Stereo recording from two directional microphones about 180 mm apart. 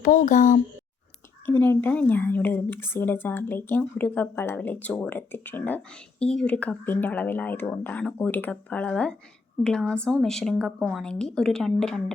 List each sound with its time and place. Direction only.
0.0 s speech: 45° left (ahead or behind)
1.5 s a woman's voice: 10° left (ahead or behind)